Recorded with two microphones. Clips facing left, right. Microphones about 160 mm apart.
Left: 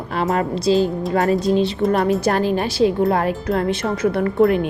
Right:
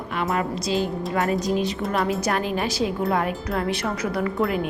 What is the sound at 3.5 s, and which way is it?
Speech, 25° left (ahead or behind).